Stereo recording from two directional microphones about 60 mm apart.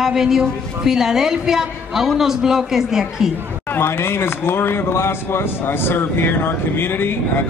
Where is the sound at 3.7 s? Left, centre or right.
Left.